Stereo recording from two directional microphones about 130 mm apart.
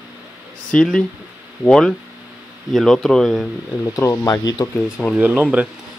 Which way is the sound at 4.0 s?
25° left (ahead or behind).